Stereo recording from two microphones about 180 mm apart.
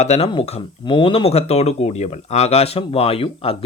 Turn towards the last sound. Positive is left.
turn(degrees=30)  # may be behind; listen again after turning